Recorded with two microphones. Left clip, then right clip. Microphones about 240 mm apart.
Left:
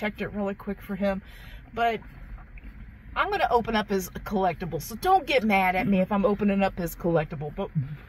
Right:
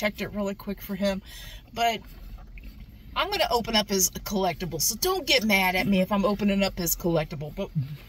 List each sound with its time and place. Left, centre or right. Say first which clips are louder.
0.0 s speech: right 1 dB; right
3.2 s speech: left 1 dB; right